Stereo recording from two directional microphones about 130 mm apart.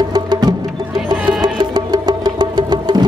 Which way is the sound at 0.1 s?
30° right (ahead or behind).